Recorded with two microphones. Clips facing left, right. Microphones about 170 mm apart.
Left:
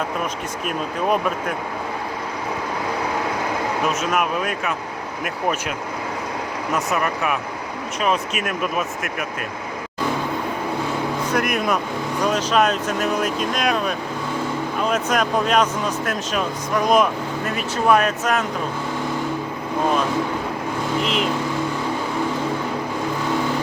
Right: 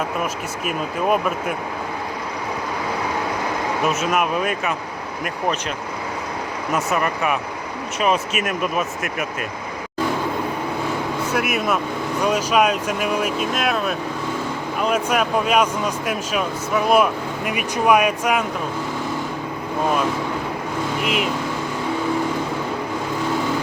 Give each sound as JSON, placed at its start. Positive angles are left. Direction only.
{"t": 0.6, "sound": "speech", "side_deg": -5}
{"t": 3.8, "sound": "speech", "side_deg": 0}
{"t": 6.7, "sound": "speech", "side_deg": 0}
{"t": 11.3, "sound": "speech", "side_deg": -5}
{"t": 21.0, "sound": "speech", "side_deg": -5}